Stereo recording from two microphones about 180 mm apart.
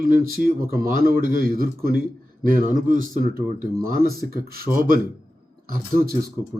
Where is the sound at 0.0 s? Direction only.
55° right (ahead or behind).